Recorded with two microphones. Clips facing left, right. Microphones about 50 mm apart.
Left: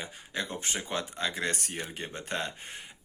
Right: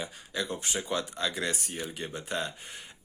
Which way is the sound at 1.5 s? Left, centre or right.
Left.